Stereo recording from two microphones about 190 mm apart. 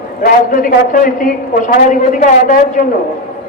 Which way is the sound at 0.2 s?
45° left (ahead or behind).